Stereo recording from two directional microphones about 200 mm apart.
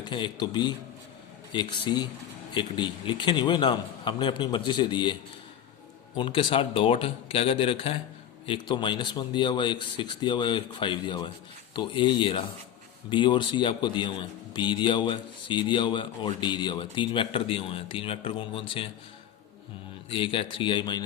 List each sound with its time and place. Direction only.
0.0 s a man's voice: 20° left (ahead or behind)
6.1 s a man's voice: 25° left (ahead or behind)
20.1 s a man's voice: 25° left (ahead or behind)